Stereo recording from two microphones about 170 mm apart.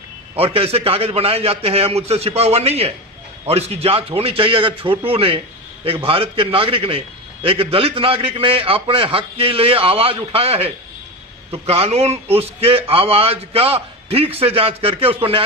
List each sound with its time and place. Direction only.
0.4 s a man's voice: 35° right (ahead or behind)